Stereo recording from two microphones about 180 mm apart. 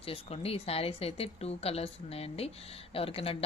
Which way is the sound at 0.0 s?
30° left (ahead or behind).